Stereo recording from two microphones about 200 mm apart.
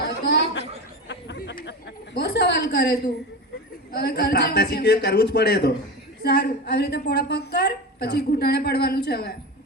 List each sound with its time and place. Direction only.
0.3 s chatter: 55° left (ahead or behind)
2.1 s a sound: 55° left (ahead or behind)
3.9 s a woman's voice: 55° left (ahead or behind)